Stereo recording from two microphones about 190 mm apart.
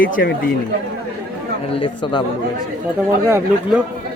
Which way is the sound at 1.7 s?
25° left (ahead or behind).